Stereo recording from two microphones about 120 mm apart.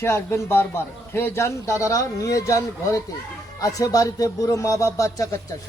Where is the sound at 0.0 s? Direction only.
20° left (ahead or behind).